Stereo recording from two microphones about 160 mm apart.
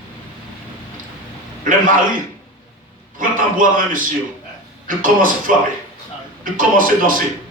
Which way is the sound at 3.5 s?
55° right (ahead or behind).